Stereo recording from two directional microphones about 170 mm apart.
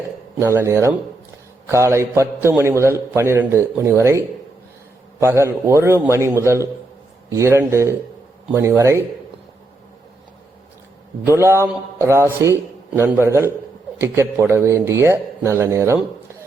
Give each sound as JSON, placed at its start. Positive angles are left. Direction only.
{"t": 0.3, "sound": "a man's voice", "side_deg": -15}
{"t": 5.2, "sound": "a man's voice", "side_deg": -15}
{"t": 11.3, "sound": "a man's voice", "side_deg": -15}